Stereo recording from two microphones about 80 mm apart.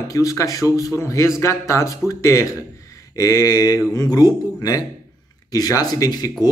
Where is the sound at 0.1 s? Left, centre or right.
Left.